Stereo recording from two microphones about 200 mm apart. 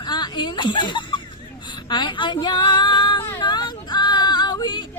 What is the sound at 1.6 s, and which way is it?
Female singing, 20° left (ahead or behind).